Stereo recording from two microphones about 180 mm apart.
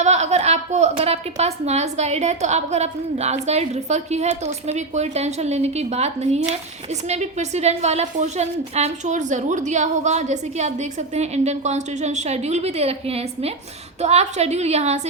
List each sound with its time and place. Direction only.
0.0 s a woman's voice: 40° right (ahead or behind)